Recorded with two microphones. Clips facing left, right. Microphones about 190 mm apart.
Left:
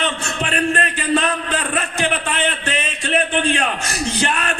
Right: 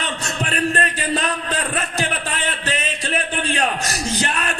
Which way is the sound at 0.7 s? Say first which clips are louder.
Left 3 dB; 35° right (ahead or behind).